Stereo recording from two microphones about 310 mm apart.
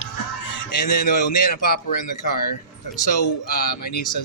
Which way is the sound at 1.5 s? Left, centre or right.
Left.